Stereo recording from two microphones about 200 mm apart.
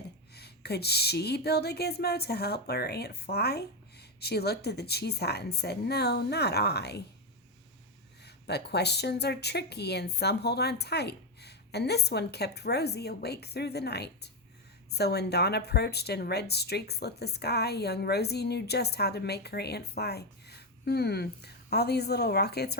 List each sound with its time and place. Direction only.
0.3 s speech: 55° left (ahead or behind)
8.2 s speech: 55° left (ahead or behind)